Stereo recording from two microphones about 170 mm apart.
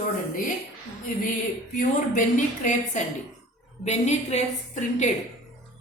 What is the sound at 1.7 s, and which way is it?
A woman's voice, 50° left (ahead or behind).